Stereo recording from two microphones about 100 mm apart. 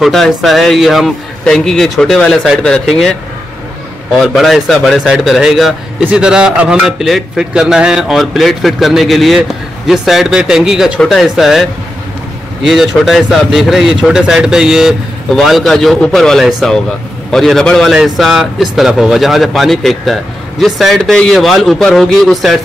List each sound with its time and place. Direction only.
0.0 s speech: centre (ahead or behind)
4.2 s speech: centre (ahead or behind)
12.6 s speech: 5° right (ahead or behind)